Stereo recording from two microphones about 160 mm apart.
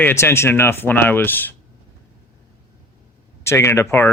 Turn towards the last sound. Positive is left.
turn(degrees=15)  # may be behind; listen again after turning